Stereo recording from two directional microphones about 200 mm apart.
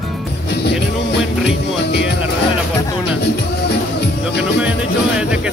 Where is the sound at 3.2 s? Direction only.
55° left (ahead or behind).